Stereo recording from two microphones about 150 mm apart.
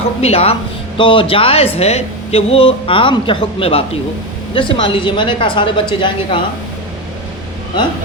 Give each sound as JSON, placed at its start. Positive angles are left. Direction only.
{"t": 0.2, "sound": "speech", "side_deg": 45}